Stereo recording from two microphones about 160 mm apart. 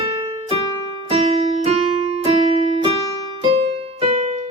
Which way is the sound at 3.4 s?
35° right (ahead or behind).